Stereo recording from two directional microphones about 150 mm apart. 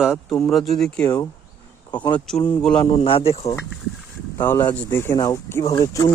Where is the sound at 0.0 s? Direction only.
5° right (ahead or behind).